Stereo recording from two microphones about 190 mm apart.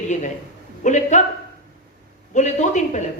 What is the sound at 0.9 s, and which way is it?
Speech, 40° left (ahead or behind).